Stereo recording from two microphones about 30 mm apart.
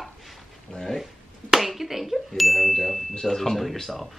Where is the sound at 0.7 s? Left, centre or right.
Centre.